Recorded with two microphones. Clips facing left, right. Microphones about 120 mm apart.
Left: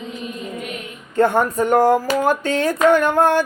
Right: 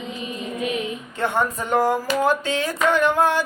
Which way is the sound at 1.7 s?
50° left (ahead or behind).